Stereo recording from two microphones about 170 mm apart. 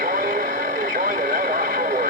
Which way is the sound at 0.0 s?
55° right (ahead or behind).